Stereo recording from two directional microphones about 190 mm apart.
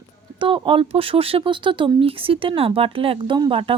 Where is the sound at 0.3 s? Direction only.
25° right (ahead or behind).